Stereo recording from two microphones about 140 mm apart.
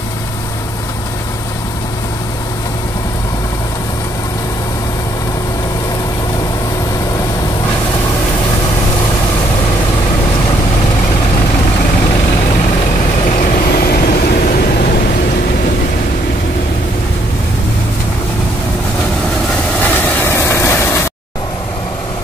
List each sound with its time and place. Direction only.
13.4 s vehicle: 90° left
19.8 s vehicle: 10° left (ahead or behind)